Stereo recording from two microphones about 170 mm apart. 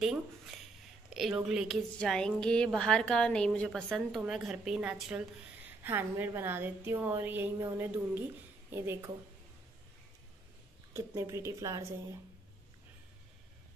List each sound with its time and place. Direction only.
0.0 s a woman's voice: centre (ahead or behind)
10.9 s a woman's voice: 15° right (ahead or behind)